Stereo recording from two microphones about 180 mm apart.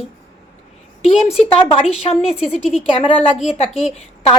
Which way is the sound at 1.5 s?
30° left (ahead or behind).